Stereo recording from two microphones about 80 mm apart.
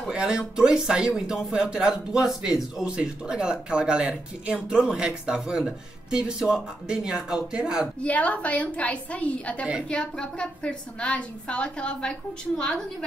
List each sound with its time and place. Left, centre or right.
0.1 s speech: centre
8.0 s a woman's voice: centre